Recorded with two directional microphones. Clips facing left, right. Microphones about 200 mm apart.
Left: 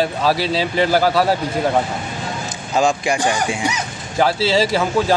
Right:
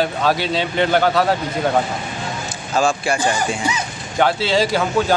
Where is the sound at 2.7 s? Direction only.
15° left (ahead or behind).